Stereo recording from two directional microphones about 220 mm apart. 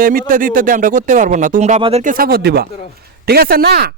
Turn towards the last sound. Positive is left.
turn(degrees=-45)  # may be behind; listen again after turning